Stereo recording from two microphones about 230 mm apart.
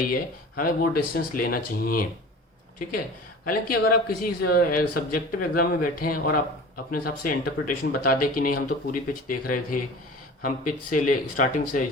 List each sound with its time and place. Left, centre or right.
0.1 s speech: left
3.4 s speech: left